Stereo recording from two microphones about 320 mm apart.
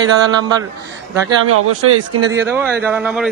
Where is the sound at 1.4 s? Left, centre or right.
Right.